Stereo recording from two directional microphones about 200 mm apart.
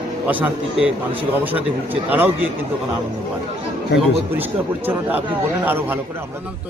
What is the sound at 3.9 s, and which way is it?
Speech, 60° left (ahead or behind).